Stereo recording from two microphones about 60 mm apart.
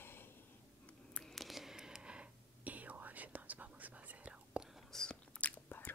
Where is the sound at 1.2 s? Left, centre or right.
Centre.